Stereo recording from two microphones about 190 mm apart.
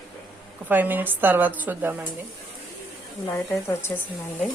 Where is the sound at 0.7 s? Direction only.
10° right (ahead or behind).